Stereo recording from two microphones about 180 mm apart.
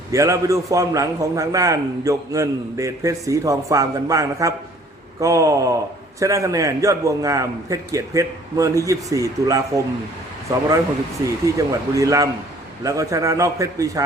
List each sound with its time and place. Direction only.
0.1 s a man's voice: 15° right (ahead or behind)
11.4 s a man's voice: 15° right (ahead or behind)